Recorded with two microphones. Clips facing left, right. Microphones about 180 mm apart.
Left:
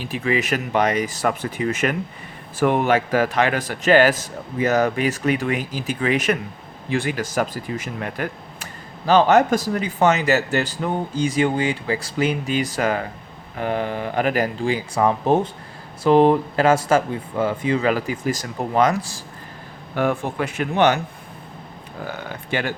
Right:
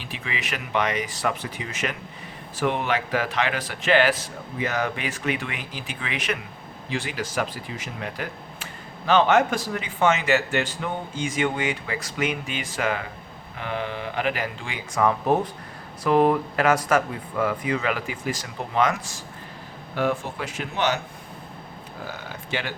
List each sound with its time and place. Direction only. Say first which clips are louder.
0.0 s a man's voice: left 11 dB; 45° left (ahead or behind)
9.0 s a man's voice: left 4 dB; 40° left (ahead or behind)
20.0 s speech: left 4 dB; 55° left (ahead or behind)
22.3 s a man's voice: left 6 dB; 50° left (ahead or behind)